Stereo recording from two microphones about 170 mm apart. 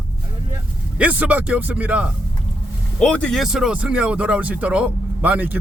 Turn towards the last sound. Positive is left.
turn(degrees=-10)  # may be behind; listen again after turning